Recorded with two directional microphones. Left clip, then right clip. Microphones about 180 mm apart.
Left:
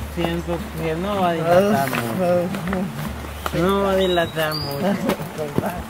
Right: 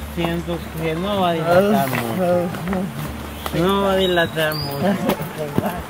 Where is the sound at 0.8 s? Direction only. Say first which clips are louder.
Right 1 dB; 5° right (ahead or behind).